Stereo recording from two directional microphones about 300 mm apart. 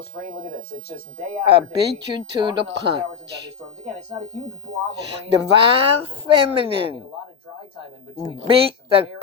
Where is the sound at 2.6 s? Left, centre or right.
Right.